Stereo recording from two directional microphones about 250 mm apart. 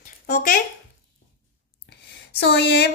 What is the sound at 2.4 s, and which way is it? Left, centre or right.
Speech, left.